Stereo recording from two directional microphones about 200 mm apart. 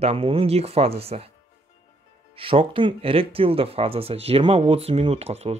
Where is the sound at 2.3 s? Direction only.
25° right (ahead or behind).